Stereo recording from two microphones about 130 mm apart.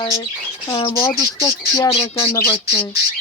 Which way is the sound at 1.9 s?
45° left (ahead or behind).